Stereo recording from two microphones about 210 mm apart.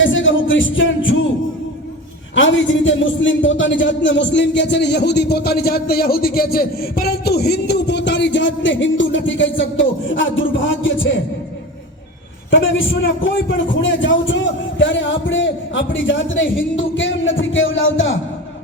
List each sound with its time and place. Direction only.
0.0 s music: 65° left (ahead or behind)
2.3 s a man's voice: 65° left (ahead or behind)
12.5 s a man's voice: 65° left (ahead or behind)
13.8 s a man's voice: 65° left (ahead or behind)